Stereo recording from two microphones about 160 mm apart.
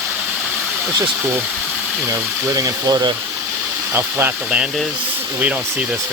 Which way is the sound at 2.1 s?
20° right (ahead or behind).